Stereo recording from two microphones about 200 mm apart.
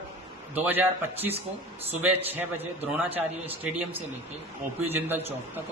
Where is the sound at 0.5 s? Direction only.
10° right (ahead or behind).